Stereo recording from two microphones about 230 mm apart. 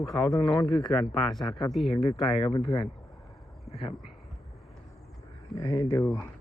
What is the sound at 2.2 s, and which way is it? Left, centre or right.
Speech, left.